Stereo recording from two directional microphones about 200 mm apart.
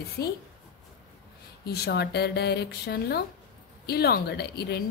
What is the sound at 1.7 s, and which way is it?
Speech, 55° left (ahead or behind).